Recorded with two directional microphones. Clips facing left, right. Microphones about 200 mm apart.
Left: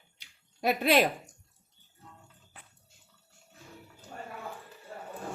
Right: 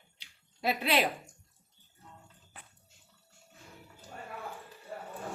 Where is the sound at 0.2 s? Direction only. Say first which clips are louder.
Left 4 dB; 45° left (ahead or behind).